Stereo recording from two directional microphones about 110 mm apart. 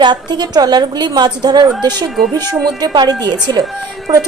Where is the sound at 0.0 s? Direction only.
40° right (ahead or behind).